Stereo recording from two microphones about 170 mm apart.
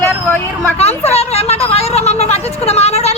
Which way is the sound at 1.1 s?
40° left (ahead or behind).